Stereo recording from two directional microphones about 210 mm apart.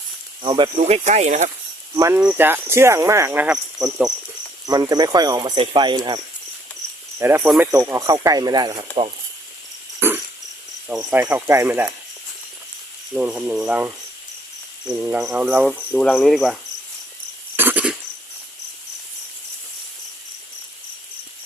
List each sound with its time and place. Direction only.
0.4 s speech: 25° right (ahead or behind)
2.0 s speech: 10° right (ahead or behind)
4.6 s speech: 20° right (ahead or behind)
7.2 s speech: 10° right (ahead or behind)
10.0 s a sound: 10° right (ahead or behind)
10.8 s speech: 10° right (ahead or behind)
13.1 s speech: 5° right (ahead or behind)
15.0 s speech: 10° right (ahead or behind)
15.7 s speech: 5° left (ahead or behind)
17.6 s a sound: 10° right (ahead or behind)